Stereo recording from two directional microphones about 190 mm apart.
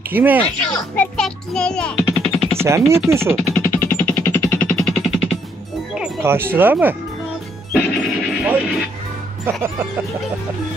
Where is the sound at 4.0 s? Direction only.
10° left (ahead or behind).